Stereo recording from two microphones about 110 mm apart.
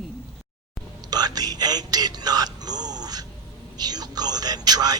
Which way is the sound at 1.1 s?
35° right (ahead or behind).